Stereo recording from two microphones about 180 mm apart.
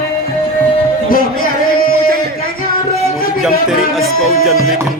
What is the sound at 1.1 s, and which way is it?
Music, 55° left (ahead or behind).